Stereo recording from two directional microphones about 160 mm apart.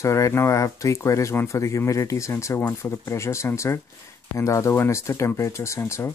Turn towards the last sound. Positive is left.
turn(degrees=15)  # may be behind; listen again after turning